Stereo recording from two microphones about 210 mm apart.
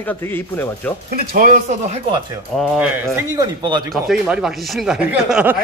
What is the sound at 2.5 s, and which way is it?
Speech, 5° right (ahead or behind).